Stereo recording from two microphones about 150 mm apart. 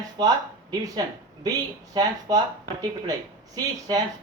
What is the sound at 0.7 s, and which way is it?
Speech, 25° right (ahead or behind).